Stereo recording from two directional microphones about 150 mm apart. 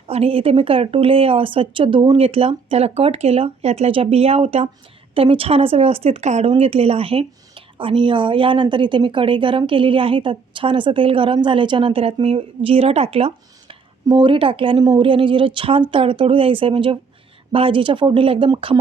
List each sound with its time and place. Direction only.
0.1 s speech: 40° right (ahead or behind)